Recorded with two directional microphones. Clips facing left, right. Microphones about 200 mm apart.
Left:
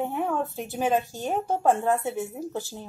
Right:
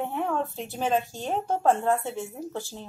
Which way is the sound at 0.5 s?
15° left (ahead or behind).